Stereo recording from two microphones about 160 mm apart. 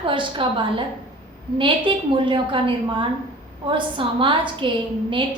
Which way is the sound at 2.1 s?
30° right (ahead or behind).